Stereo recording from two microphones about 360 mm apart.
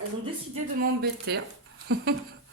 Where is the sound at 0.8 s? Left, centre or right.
Right.